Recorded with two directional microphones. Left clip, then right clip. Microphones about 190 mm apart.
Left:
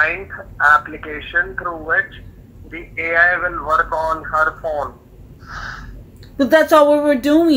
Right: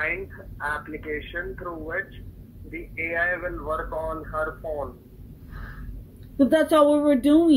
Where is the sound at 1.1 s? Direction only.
15° left (ahead or behind).